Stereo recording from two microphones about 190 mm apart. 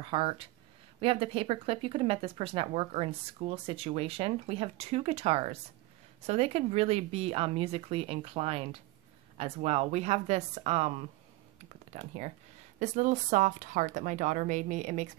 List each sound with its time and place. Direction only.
0.0 s speech: 25° right (ahead or behind)
11.9 s speech: 35° right (ahead or behind)